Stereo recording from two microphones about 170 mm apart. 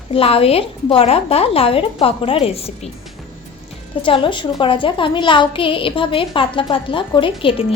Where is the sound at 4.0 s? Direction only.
30° left (ahead or behind).